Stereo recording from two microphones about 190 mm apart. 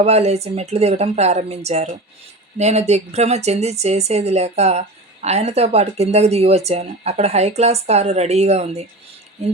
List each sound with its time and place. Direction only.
0.0 s a woman's voice: 35° right (ahead or behind)